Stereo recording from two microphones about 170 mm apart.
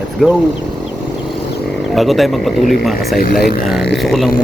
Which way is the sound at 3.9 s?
Centre (ahead or behind).